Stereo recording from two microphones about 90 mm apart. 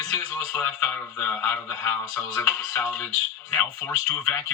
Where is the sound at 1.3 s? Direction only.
30° left (ahead or behind).